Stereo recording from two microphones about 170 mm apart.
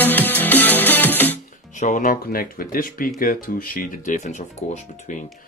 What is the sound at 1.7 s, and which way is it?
Speech, 45° left (ahead or behind).